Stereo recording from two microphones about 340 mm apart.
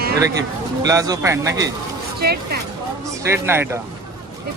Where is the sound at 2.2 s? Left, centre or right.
Right.